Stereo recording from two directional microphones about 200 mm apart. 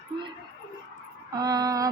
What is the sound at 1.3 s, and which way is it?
Speech, 20° right (ahead or behind).